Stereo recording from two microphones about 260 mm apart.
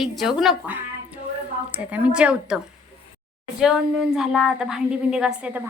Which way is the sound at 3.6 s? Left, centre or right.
Centre.